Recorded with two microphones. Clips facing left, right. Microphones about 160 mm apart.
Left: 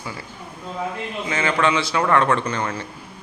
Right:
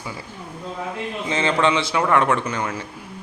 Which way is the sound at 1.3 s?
20° right (ahead or behind).